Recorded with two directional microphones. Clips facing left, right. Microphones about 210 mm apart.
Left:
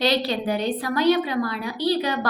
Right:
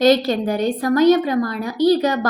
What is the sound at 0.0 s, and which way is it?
A woman's voice, 45° right (ahead or behind).